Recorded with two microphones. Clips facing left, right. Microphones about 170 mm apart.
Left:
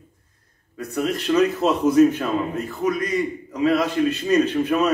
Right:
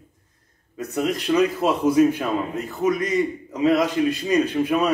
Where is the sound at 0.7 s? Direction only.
20° right (ahead or behind).